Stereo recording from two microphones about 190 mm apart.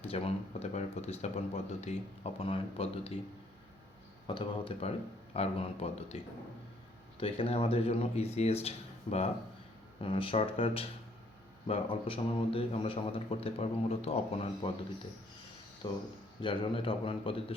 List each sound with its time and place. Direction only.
0.0 s speech: 30° left (ahead or behind)
4.3 s speech: 25° left (ahead or behind)
7.2 s a man's voice: 30° left (ahead or behind)
16.4 s a man's voice: 25° left (ahead or behind)